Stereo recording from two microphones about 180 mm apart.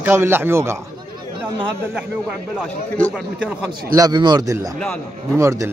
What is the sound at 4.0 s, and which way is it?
A man's voice, 25° right (ahead or behind).